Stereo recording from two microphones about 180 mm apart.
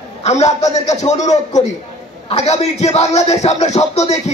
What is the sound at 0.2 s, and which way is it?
Music, 40° left (ahead or behind).